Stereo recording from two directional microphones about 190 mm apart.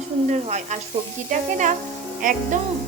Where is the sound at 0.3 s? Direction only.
35° right (ahead or behind).